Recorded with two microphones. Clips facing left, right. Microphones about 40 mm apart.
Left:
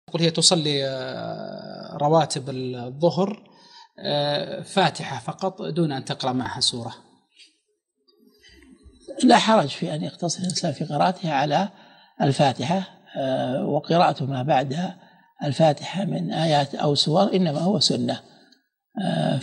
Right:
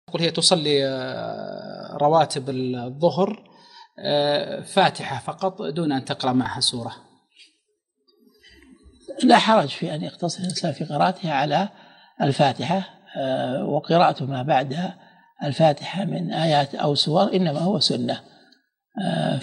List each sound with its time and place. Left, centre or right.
0.0 s speech: centre
9.0 s speech: centre